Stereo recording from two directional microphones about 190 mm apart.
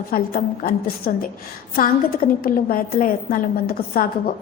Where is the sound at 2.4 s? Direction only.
45° left (ahead or behind).